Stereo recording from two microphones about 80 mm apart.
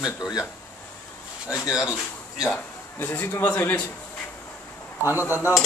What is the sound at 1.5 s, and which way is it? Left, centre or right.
Speech, left.